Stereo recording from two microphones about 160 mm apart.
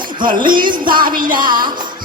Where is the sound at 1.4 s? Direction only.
30° right (ahead or behind).